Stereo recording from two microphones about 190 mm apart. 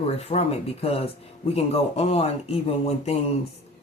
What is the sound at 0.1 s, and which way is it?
Speech, 35° left (ahead or behind).